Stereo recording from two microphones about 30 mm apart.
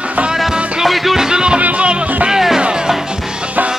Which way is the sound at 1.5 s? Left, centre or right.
Right.